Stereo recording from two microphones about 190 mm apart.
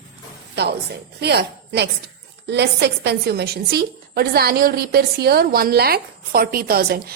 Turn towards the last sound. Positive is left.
turn(degrees=-50)  # may be behind; listen again after turning